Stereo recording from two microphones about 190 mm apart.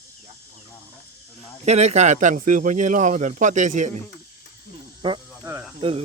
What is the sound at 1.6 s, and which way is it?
Speech, 35° right (ahead or behind).